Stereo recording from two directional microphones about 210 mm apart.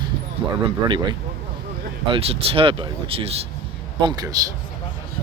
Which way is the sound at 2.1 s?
25° right (ahead or behind).